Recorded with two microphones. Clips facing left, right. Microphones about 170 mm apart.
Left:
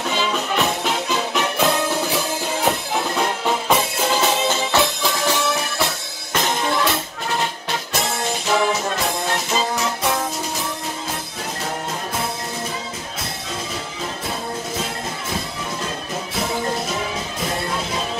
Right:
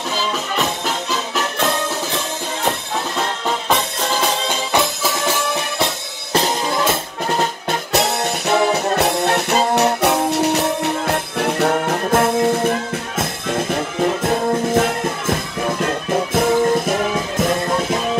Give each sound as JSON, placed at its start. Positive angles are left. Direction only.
{"t": 0.1, "sound": "music", "side_deg": 0}
{"t": 3.2, "sound": "music", "side_deg": 5}
{"t": 5.0, "sound": "music", "side_deg": -10}
{"t": 6.3, "sound": "drum kit", "side_deg": -35}
{"t": 7.9, "sound": "music", "side_deg": -65}